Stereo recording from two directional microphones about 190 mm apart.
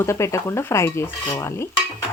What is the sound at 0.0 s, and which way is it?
Speech, 15° left (ahead or behind).